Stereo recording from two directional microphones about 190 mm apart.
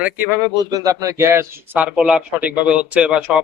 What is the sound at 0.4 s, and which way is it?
A man's voice, 20° right (ahead or behind).